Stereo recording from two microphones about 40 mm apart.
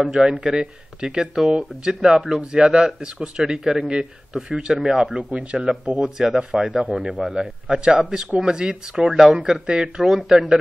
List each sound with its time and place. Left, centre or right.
0.4 s a man's voice: right
4.7 s speech: centre
5.1 s a man's voice: right
5.9 s speech: centre
6.8 s a man's voice: right